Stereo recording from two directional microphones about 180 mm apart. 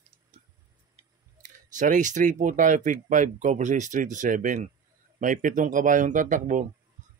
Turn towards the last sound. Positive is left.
turn(degrees=-45)  # may be behind; listen again after turning